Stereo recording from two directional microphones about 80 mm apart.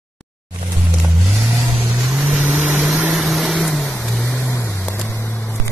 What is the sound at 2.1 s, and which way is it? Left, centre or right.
Vehicle, centre.